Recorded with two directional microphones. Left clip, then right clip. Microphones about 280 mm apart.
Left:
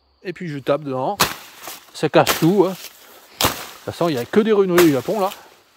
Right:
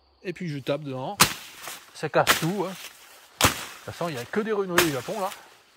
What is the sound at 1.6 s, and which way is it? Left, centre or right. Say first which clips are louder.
Speech: left 12 dB; left.